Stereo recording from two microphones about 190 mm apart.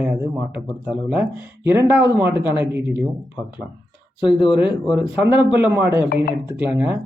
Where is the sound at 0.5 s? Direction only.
5° right (ahead or behind).